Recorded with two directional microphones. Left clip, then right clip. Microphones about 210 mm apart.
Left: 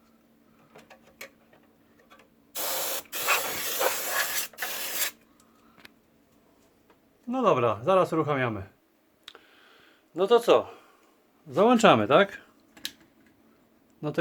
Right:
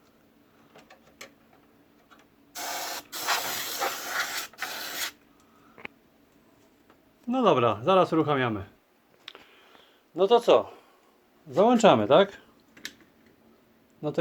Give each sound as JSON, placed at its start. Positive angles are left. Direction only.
{"t": 3.1, "sound": "hiss", "side_deg": -5}
{"t": 4.0, "sound": "spray", "side_deg": 20}
{"t": 7.3, "sound": "speech", "side_deg": -15}
{"t": 9.2, "sound": "a sound", "side_deg": 5}
{"t": 10.2, "sound": "speech", "side_deg": 5}
{"t": 14.0, "sound": "speech", "side_deg": 10}